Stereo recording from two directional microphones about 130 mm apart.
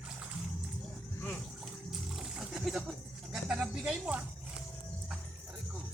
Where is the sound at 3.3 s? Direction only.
5° right (ahead or behind).